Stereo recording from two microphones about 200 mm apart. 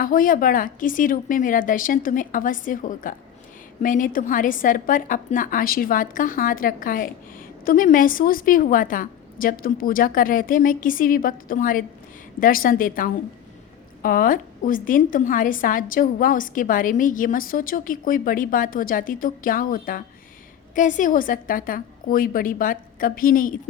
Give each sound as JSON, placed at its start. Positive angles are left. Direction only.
{"t": 0.0, "sound": "a woman's voice", "side_deg": 45}